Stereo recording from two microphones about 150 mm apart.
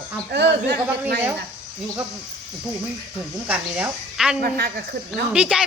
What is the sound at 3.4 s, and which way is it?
Speech, 10° right (ahead or behind).